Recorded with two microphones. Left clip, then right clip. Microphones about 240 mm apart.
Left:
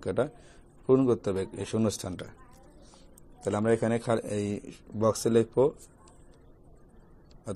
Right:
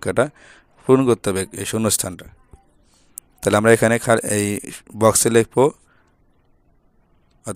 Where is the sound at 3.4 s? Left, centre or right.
Right.